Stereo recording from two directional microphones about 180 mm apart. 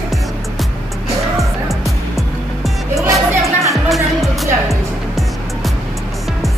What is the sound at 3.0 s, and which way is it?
Music, 15° right (ahead or behind).